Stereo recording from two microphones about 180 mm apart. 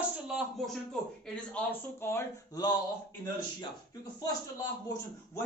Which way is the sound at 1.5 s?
15° left (ahead or behind).